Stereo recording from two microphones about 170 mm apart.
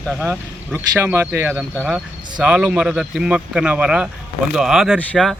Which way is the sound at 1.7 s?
10° left (ahead or behind).